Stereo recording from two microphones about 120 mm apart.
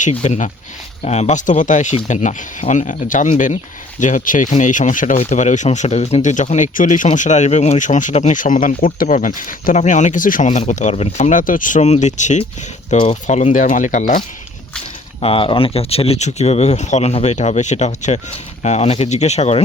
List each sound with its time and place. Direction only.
0.1 s speech: 70° left (ahead or behind)
1.0 s speech: 70° left (ahead or behind); by 10.6 s 90° left
10.7 s speech: 80° left
15.2 s speech: 50° left (ahead or behind)